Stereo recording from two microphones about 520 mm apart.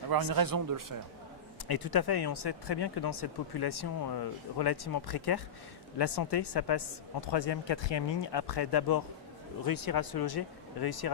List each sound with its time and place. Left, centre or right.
0.1 s speech: right
1.6 s speech: left